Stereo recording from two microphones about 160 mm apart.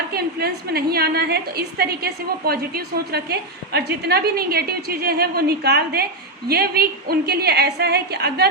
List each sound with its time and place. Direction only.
0.1 s a woman's voice: 75° right (ahead or behind)